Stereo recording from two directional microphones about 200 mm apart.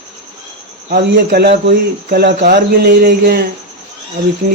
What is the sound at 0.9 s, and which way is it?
Speech, 55° right (ahead or behind).